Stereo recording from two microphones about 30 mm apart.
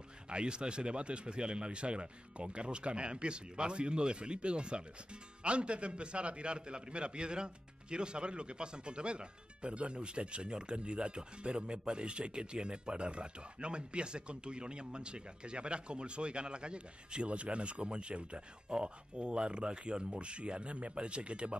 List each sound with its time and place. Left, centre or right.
0.3 s speech: right